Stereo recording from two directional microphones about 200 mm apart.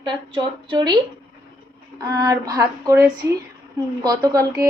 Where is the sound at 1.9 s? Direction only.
20° right (ahead or behind).